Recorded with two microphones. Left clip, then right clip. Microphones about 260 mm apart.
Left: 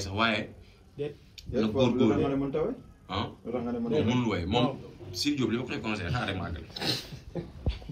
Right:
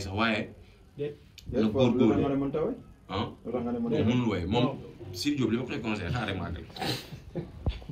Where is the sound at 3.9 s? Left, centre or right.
Centre.